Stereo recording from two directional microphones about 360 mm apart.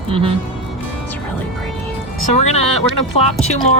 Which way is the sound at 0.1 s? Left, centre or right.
Centre.